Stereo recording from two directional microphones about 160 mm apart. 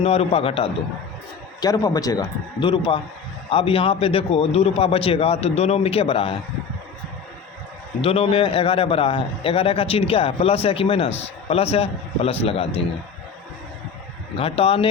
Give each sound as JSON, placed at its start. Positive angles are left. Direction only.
{"t": 0.0, "sound": "a man's voice", "side_deg": 40}
{"t": 1.6, "sound": "a man's voice", "side_deg": 25}
{"t": 8.0, "sound": "a man's voice", "side_deg": 35}
{"t": 14.3, "sound": "a man's voice", "side_deg": 35}